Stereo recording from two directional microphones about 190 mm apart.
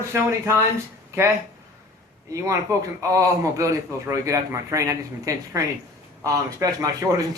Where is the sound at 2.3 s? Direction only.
15° right (ahead or behind).